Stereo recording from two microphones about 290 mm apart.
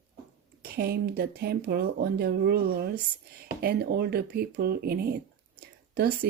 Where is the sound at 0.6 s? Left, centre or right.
Right.